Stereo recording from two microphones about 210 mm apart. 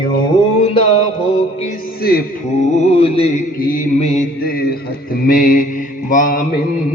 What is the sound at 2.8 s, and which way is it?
Music, 30° left (ahead or behind).